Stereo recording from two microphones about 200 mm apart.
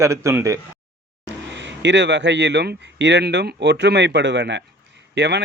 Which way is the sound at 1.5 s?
65° right (ahead or behind).